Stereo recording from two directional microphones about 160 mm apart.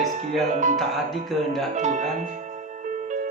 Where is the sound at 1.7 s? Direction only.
50° right (ahead or behind).